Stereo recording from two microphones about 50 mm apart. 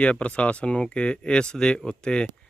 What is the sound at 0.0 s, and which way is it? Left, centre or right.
Speech, left.